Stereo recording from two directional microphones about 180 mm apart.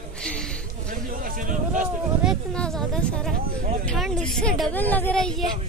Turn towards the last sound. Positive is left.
turn(degrees=5)  # may be behind; listen again after turning